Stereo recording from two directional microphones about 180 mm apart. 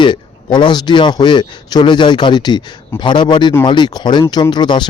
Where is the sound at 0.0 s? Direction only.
25° left (ahead or behind).